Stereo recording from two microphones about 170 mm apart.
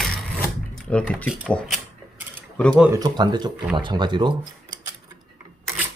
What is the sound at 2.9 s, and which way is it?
Speech, 25° right (ahead or behind).